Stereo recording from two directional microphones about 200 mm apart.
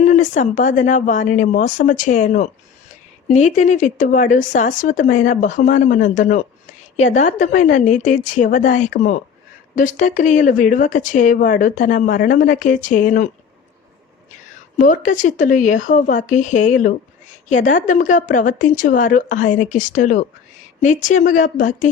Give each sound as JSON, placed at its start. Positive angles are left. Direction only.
{"t": 0.0, "sound": "speech", "side_deg": 35}
{"t": 14.8, "sound": "speech", "side_deg": 40}